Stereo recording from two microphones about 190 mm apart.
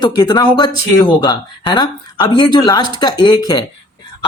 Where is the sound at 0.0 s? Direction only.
20° left (ahead or behind).